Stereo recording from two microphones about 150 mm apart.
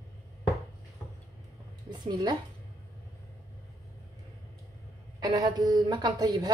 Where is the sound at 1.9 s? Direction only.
30° right (ahead or behind).